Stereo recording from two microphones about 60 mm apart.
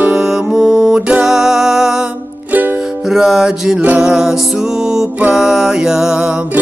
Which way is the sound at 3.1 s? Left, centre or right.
Centre.